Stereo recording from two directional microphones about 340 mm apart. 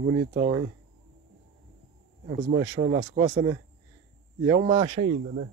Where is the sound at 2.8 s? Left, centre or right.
Right.